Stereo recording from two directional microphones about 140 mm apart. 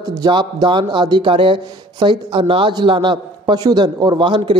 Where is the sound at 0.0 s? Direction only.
30° right (ahead or behind).